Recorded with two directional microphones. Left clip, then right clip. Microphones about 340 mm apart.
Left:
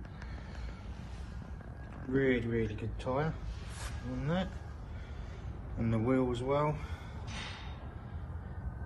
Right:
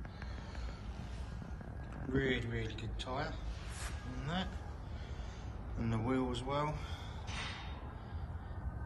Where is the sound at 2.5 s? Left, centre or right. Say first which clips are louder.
Left 7 dB; centre.